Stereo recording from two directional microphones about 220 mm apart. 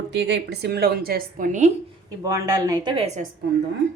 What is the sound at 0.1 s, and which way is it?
A woman's voice, 55° right (ahead or behind).